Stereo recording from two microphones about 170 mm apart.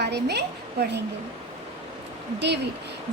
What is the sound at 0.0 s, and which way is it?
A woman's voice, 75° right (ahead or behind).